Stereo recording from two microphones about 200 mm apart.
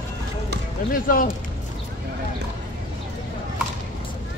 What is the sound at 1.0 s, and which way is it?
Speech, 45° left (ahead or behind).